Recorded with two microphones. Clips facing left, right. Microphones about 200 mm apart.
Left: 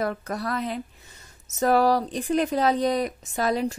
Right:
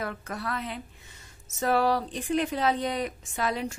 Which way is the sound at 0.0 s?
40° left (ahead or behind).